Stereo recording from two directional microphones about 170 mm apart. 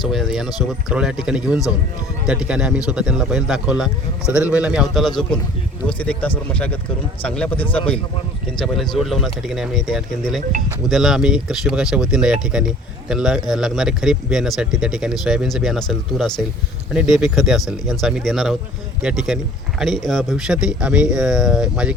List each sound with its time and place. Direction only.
0.0 s speech: centre (ahead or behind)